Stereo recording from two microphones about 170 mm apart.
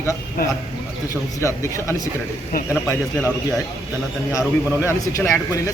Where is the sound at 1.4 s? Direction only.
15° left (ahead or behind).